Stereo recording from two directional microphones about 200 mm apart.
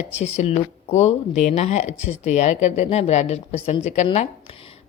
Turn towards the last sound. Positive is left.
turn(degrees=35)  # may be behind; listen again after turning